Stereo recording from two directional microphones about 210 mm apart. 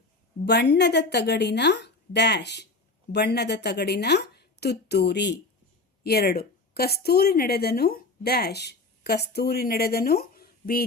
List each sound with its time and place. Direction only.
0.3 s a woman's voice: 55° left (ahead or behind)